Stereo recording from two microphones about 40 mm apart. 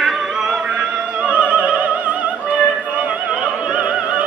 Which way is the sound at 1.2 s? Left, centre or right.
Right.